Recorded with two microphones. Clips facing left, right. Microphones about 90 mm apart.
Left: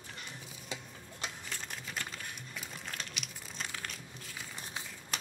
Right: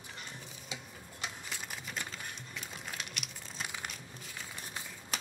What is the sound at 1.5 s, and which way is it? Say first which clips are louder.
Typing: even; 5° right (ahead or behind).